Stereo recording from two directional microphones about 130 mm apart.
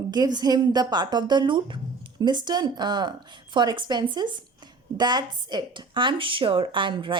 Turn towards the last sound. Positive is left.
turn(degrees=-40)  # may be behind; listen again after turning